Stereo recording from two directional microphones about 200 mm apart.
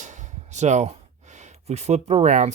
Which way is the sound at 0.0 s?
35° right (ahead or behind).